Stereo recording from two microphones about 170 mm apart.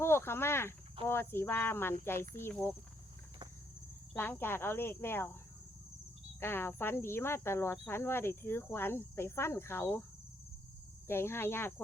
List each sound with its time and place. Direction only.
0.0 s cricket: 15° left (ahead or behind)
1.0 s speech: 15° left (ahead or behind)
4.1 s speech: 10° left (ahead or behind)
6.4 s speech: 15° left (ahead or behind)
11.1 s speech: 15° left (ahead or behind)